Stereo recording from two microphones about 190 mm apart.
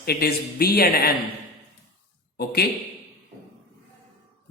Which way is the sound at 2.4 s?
55° left (ahead or behind).